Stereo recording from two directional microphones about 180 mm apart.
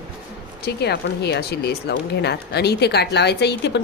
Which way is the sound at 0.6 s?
65° left (ahead or behind).